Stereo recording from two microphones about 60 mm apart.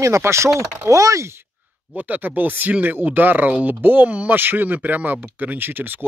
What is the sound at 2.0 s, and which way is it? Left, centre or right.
Speech, right.